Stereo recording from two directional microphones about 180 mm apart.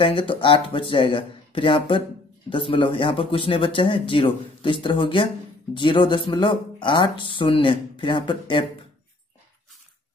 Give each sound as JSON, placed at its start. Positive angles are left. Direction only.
{"t": 0.0, "sound": "speech", "side_deg": 30}